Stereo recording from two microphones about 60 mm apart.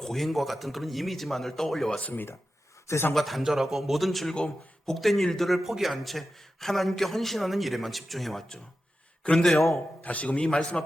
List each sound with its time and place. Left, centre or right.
0.0 s a man's voice: centre
2.0 s a man's voice: left
3.2 s a man's voice: centre
9.5 s a man's voice: centre
10.0 s a man's voice: left
10.4 s a man's voice: centre